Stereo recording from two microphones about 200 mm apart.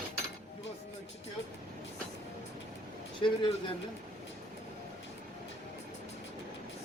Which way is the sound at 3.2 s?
25° left (ahead or behind).